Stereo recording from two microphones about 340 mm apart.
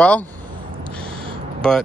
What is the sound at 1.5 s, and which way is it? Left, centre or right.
Speech, centre.